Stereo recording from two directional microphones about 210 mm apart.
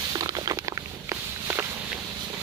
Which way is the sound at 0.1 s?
15° right (ahead or behind).